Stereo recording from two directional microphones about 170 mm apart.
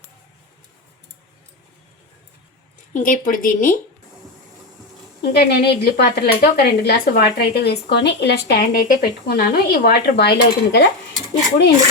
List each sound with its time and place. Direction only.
2.9 s speech: 50° left (ahead or behind)
5.2 s speech: 70° left (ahead or behind)